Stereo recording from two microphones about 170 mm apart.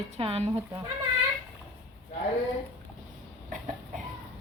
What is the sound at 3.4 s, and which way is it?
Cough, 50° right (ahead or behind).